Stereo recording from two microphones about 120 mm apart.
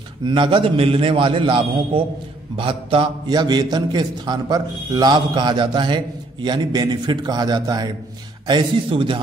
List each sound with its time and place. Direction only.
0.3 s a man's voice: 45° right (ahead or behind)